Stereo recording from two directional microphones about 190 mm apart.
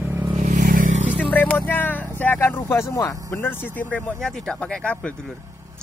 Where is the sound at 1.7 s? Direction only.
10° left (ahead or behind).